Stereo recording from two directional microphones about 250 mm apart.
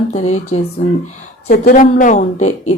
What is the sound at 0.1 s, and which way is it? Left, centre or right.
A woman's voice, left.